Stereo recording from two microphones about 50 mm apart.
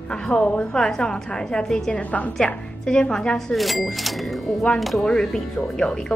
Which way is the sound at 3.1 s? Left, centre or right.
Centre.